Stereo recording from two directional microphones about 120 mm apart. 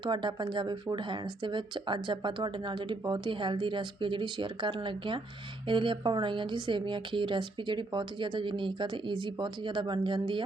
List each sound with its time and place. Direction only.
0.0 s a woman's voice: 40° right (ahead or behind)